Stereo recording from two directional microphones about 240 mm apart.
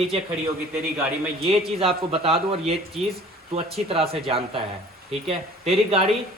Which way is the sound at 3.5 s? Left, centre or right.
Right.